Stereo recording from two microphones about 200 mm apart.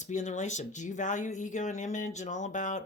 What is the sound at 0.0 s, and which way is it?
Speech, 35° left (ahead or behind).